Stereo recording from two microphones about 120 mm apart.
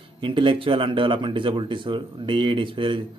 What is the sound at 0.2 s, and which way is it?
Speech, 45° right (ahead or behind).